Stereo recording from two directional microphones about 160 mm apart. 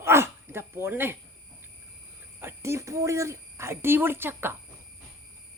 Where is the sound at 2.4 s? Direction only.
15° right (ahead or behind).